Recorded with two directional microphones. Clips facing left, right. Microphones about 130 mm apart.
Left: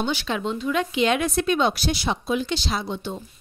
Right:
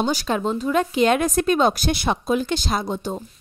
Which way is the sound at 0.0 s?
40° right (ahead or behind).